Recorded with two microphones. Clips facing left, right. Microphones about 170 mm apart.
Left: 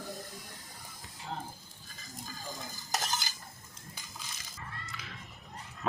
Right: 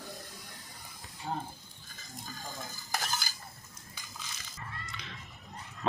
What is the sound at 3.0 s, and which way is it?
Stir, 20° left (ahead or behind).